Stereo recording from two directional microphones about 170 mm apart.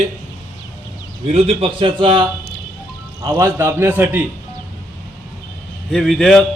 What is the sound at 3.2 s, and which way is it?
A man's voice, 15° right (ahead or behind).